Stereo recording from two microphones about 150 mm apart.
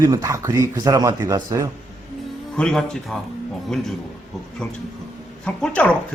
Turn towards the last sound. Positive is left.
turn(degrees=5)  # may be behind; listen again after turning